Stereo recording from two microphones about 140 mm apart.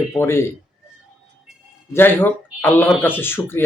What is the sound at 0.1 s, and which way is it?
Speech, 20° left (ahead or behind).